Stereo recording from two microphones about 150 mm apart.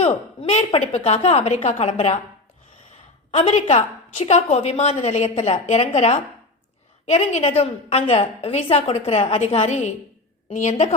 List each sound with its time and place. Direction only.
0.0 s a woman's voice: 45° left (ahead or behind)
3.3 s a woman's voice: 45° left (ahead or behind)